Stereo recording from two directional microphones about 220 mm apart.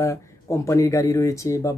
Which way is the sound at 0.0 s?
15° left (ahead or behind).